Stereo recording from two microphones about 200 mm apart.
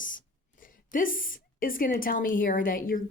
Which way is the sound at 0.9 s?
45° left (ahead or behind).